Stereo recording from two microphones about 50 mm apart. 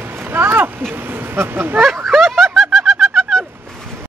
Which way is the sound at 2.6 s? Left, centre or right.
Centre.